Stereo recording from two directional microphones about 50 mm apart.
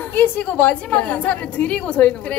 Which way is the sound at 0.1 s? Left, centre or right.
Left.